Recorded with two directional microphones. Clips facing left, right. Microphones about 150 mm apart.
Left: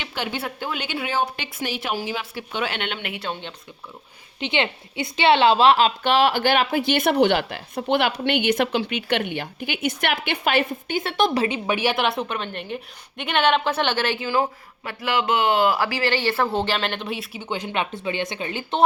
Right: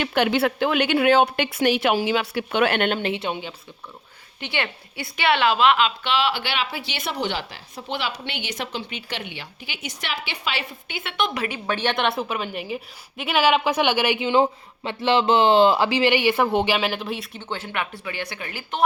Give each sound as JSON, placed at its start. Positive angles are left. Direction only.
{"t": 0.0, "sound": "a woman's voice", "side_deg": -60}
{"t": 3.0, "sound": "speech", "side_deg": -25}
{"t": 4.4, "sound": "a woman's voice", "side_deg": 20}